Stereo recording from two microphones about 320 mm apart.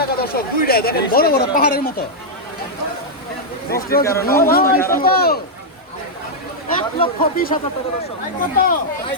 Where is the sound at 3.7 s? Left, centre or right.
Left.